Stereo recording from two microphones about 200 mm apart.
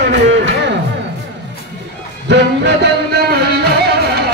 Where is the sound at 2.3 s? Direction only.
60° right (ahead or behind).